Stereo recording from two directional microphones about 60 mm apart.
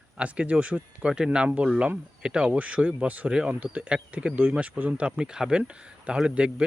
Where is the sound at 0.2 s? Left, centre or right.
Right.